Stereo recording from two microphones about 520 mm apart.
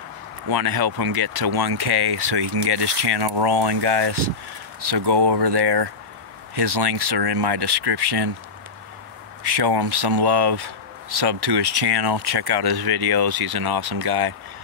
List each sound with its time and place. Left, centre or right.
0.5 s speech: right
9.4 s speech: right